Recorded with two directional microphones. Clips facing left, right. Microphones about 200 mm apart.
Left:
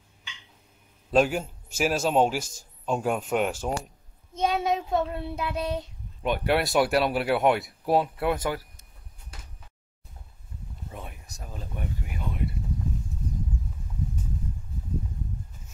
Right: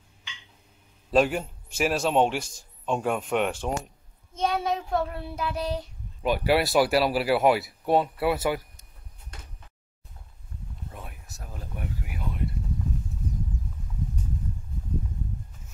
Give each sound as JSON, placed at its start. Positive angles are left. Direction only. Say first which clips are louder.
{"t": 1.1, "sound": "speech", "louder": "even", "side_deg": 0}
{"t": 4.4, "sound": "child singing", "louder": "left 1 dB", "side_deg": 20}
{"t": 6.2, "sound": "speech", "louder": "right 2 dB", "side_deg": -5}
{"t": 10.9, "sound": "a sound", "louder": "left 4 dB", "side_deg": 0}